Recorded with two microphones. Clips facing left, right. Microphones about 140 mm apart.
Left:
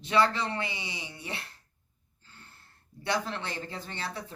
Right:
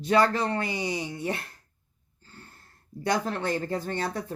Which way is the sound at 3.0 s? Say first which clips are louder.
Right 5 dB; 45° right (ahead or behind).